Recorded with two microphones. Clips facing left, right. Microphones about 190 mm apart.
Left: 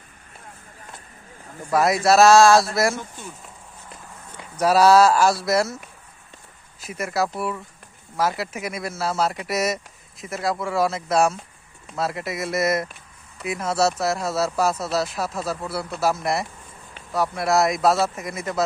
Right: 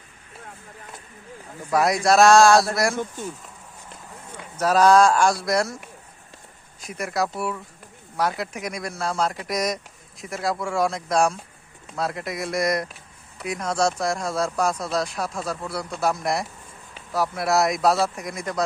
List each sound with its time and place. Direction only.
1.7 s speech: centre (ahead or behind)
2.9 s speech: 55° right (ahead or behind)
4.5 s speech: 10° left (ahead or behind)
6.8 s speech: centre (ahead or behind)